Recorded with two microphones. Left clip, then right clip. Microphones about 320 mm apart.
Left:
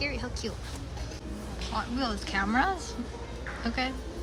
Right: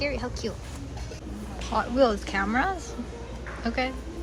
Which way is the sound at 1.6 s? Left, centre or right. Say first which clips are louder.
Right 10 dB; centre.